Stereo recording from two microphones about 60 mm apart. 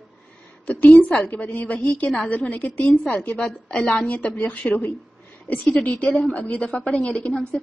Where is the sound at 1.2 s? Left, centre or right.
Left.